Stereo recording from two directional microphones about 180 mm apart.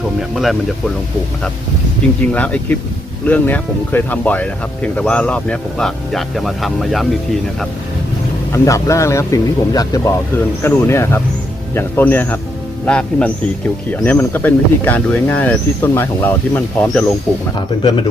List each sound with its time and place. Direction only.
0.2 s speech: centre (ahead or behind)
2.3 s speech: 10° left (ahead or behind)
8.5 s speech: 15° left (ahead or behind)